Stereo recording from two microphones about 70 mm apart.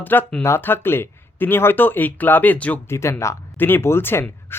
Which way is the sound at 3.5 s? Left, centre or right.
Left.